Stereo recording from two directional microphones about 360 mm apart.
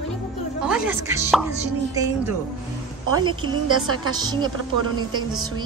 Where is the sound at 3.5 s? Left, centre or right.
Right.